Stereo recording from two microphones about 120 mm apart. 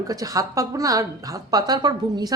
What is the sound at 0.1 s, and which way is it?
A woman's voice, 30° right (ahead or behind).